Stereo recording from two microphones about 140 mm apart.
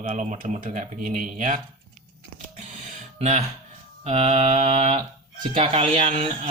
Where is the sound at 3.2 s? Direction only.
50° right (ahead or behind).